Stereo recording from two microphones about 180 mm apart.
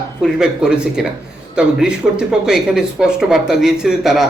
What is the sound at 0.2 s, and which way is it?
Speech, 5° right (ahead or behind).